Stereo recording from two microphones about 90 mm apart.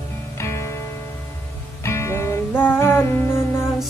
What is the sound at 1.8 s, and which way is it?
Music, 30° left (ahead or behind).